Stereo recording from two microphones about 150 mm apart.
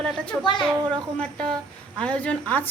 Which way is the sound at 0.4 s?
30° left (ahead or behind).